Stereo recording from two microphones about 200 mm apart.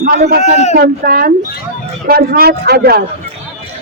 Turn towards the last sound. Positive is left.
turn(degrees=-50)  # may be behind; listen again after turning